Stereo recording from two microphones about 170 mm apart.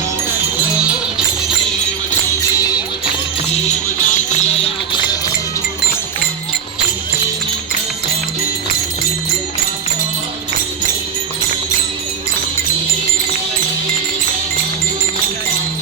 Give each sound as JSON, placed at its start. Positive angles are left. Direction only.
{"t": 2.6, "sound": "music", "side_deg": 20}
{"t": 3.5, "sound": "music", "side_deg": 40}